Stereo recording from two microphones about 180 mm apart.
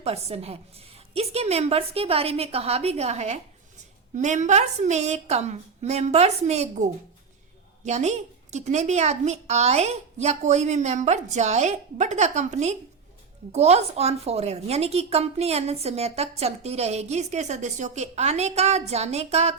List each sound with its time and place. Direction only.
0.0 s a woman's voice: 35° right (ahead or behind)
7.9 s a woman's voice: 40° right (ahead or behind)